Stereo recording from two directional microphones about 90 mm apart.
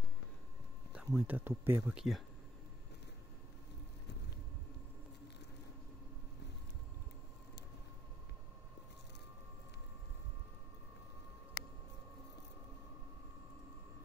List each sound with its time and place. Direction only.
0.9 s speech: 15° right (ahead or behind)
2.0 s speech: centre (ahead or behind)